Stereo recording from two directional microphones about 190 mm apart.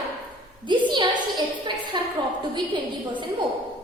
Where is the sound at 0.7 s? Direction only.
25° right (ahead or behind).